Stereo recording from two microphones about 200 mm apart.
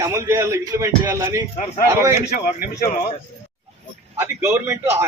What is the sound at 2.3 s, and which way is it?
Speech, 45° left (ahead or behind).